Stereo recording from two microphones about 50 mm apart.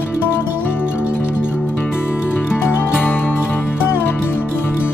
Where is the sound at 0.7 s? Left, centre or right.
Left.